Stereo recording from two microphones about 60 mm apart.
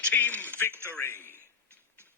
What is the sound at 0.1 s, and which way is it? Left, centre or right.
Speech, left.